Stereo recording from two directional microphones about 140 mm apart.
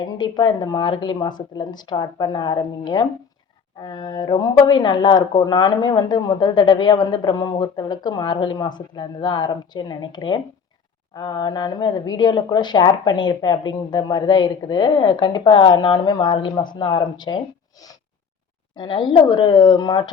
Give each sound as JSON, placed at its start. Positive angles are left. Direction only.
{"t": 0.0, "sound": "a woman's voice", "side_deg": 30}